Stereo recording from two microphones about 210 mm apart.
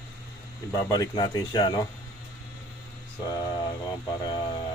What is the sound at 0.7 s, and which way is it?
Speech, 15° left (ahead or behind).